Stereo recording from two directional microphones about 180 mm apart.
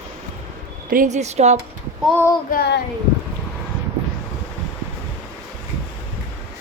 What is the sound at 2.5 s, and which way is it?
Speech, 65° left (ahead or behind).